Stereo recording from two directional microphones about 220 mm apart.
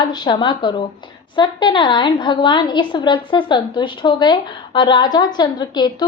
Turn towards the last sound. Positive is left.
turn(degrees=20)  # may be behind; listen again after turning